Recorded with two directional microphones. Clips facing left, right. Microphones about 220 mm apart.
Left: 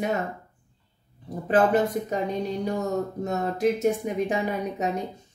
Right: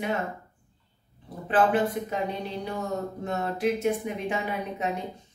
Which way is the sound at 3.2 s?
40° left (ahead or behind).